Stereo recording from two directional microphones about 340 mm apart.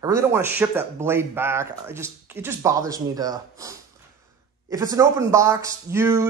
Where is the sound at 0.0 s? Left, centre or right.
Centre.